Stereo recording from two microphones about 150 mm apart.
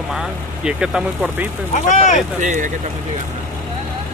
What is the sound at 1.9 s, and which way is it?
Speech, 55° left (ahead or behind).